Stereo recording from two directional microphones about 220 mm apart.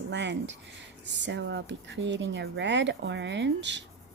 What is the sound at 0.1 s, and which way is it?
Speech, 55° right (ahead or behind).